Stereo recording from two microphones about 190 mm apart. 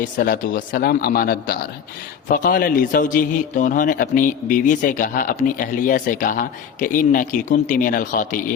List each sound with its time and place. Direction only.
0.0 s a man's voice: 45° left (ahead or behind)